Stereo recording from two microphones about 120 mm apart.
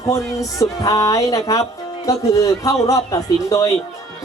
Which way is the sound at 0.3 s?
30° left (ahead or behind).